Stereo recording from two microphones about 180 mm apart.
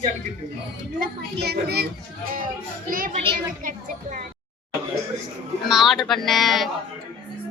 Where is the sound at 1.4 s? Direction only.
65° right (ahead or behind).